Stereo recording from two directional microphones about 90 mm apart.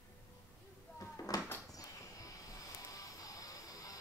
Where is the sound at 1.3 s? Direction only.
45° left (ahead or behind).